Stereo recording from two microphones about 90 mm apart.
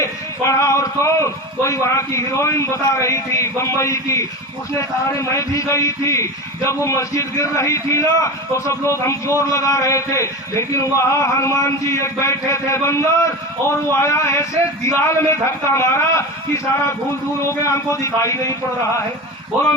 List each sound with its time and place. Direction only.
0.0 s a man's voice: 35° left (ahead or behind)
17.7 s a man's voice: 35° left (ahead or behind)